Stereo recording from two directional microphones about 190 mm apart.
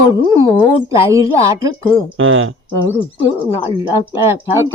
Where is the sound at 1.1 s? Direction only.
15° right (ahead or behind).